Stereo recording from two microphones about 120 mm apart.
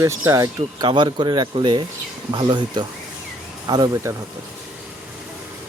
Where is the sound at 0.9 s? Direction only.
40° right (ahead or behind).